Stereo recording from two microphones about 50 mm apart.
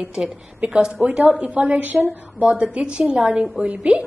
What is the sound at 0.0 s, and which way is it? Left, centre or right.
A woman's voice, centre.